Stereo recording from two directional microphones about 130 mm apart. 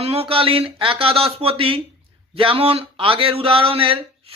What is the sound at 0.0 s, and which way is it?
Speech, 50° right (ahead or behind).